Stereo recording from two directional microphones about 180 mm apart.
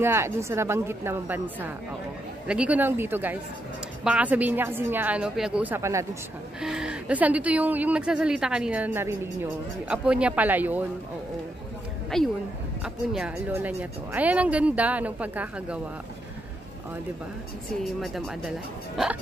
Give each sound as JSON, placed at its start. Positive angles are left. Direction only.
{"t": 0.0, "sound": "a woman's voice", "side_deg": -15}
{"t": 6.6, "sound": "a woman's voice", "side_deg": -5}
{"t": 12.1, "sound": "a woman's voice", "side_deg": 0}
{"t": 18.0, "sound": "speech", "side_deg": 0}